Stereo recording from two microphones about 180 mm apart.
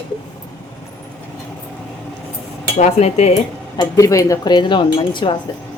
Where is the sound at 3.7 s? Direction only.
20° left (ahead or behind).